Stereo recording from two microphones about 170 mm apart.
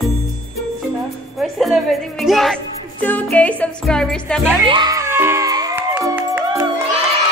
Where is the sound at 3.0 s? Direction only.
10° left (ahead or behind).